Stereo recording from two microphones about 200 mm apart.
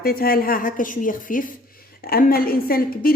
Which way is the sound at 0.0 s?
45° left (ahead or behind).